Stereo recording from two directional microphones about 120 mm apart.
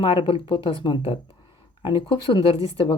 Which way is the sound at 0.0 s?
45° left (ahead or behind).